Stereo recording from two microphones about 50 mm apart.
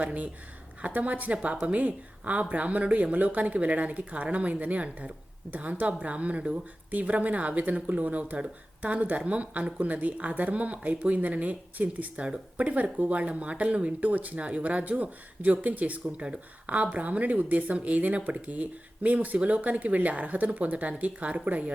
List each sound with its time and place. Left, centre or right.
0.0 s speech: right